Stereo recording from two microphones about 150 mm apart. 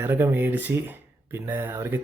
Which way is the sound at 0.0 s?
15° right (ahead or behind).